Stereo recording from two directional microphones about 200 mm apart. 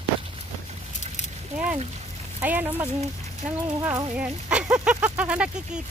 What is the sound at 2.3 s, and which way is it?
Speech, 10° right (ahead or behind).